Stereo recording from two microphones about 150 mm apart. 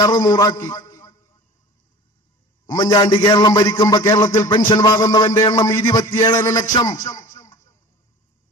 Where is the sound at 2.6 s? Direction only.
25° left (ahead or behind).